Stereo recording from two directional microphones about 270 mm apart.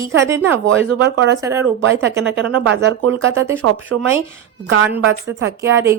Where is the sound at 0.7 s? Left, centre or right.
Right.